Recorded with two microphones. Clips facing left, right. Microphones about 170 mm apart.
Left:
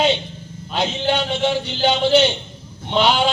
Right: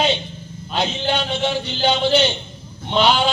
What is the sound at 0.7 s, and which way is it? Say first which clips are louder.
A man's voice: left 1 dB; 20° left (ahead or behind).